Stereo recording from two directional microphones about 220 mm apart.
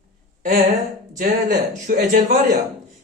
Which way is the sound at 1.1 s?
40° right (ahead or behind).